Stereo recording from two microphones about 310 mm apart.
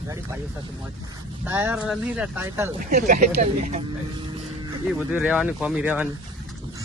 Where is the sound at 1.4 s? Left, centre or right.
Centre.